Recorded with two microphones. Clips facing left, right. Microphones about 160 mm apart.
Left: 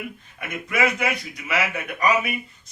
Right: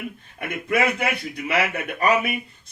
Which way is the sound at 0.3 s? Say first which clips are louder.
Right 3 dB; 55° right (ahead or behind).